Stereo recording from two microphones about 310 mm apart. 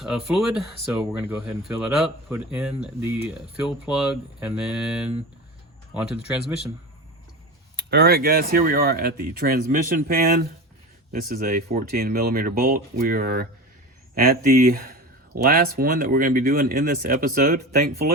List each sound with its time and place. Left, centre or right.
0.0 s speech: centre
7.8 s speech: right